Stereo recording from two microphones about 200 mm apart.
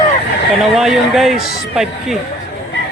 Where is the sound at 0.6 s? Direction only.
Centre (ahead or behind).